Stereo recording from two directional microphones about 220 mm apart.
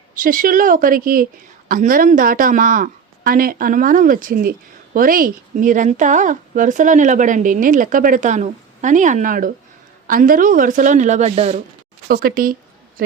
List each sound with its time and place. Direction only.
0.1 s speech: 40° right (ahead or behind)
12.0 s speech: 45° right (ahead or behind)